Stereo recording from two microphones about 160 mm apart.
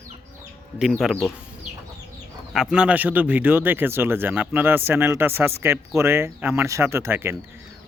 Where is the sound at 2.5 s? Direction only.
5° right (ahead or behind).